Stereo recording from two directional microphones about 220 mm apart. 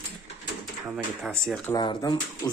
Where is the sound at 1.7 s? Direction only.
20° left (ahead or behind).